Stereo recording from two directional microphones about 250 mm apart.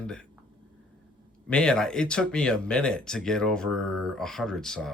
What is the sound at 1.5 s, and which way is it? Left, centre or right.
Speech, centre.